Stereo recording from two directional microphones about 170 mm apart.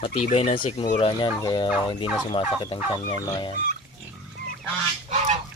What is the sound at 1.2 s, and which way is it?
Speech, 25° left (ahead or behind).